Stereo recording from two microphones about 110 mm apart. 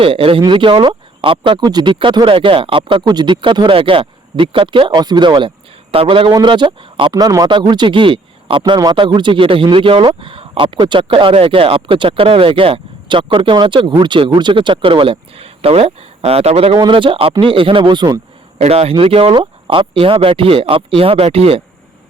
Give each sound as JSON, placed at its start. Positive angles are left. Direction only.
{"t": 0.0, "sound": "speech", "side_deg": -55}
{"t": 6.3, "sound": "speech", "side_deg": -45}
{"t": 7.1, "sound": "speech", "side_deg": -35}
{"t": 16.7, "sound": "speech", "side_deg": -45}
{"t": 18.6, "sound": "speech", "side_deg": -70}